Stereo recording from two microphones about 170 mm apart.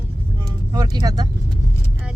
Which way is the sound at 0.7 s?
25° right (ahead or behind).